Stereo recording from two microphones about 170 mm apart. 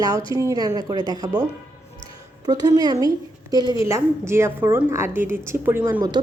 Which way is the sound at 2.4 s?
25° right (ahead or behind).